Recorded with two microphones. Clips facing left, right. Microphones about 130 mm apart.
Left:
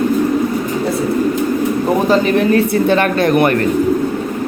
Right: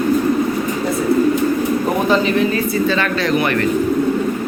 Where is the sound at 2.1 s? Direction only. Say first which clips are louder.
Left 3 dB; 55° left (ahead or behind).